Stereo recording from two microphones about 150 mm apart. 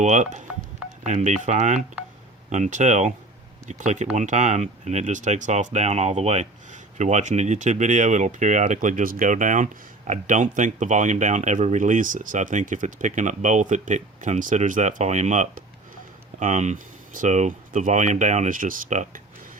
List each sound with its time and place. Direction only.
0.0 s speech: 55° right (ahead or behind)